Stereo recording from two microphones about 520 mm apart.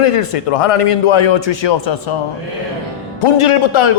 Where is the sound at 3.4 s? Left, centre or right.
Left.